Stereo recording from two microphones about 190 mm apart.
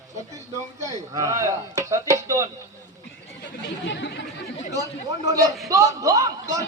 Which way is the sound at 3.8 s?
70° left (ahead or behind).